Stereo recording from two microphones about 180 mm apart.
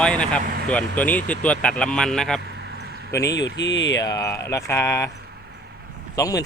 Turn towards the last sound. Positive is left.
turn(degrees=20)  # may be behind; listen again after turning